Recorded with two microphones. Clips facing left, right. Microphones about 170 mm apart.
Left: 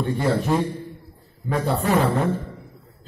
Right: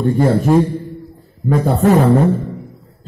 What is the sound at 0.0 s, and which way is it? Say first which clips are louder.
Speech: right 8 dB; 40° right (ahead or behind).